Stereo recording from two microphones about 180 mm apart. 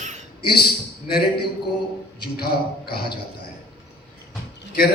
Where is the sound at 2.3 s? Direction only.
60° left (ahead or behind).